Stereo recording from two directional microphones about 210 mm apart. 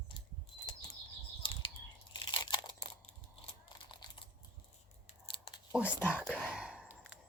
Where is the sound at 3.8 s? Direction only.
25° left (ahead or behind).